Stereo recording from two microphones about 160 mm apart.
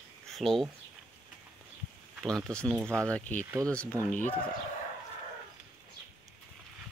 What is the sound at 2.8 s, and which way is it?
Speech, 15° right (ahead or behind).